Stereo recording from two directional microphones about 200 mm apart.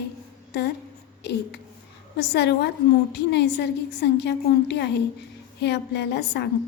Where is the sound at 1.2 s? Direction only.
60° left (ahead or behind).